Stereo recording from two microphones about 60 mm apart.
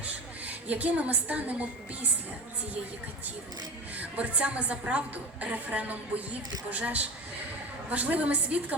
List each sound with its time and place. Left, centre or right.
0.0 s a woman's voice: right
3.9 s a woman's voice: right